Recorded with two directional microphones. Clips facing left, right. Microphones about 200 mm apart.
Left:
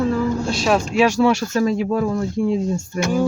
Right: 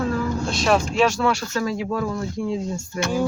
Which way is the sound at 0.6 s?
5° left (ahead or behind).